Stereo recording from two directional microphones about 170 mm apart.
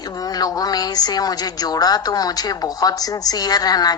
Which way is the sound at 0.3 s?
20° left (ahead or behind).